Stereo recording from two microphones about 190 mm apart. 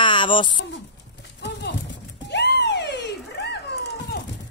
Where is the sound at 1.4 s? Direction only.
65° left (ahead or behind).